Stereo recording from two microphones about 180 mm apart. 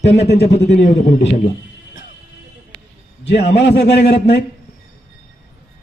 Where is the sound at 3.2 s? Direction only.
75° left (ahead or behind).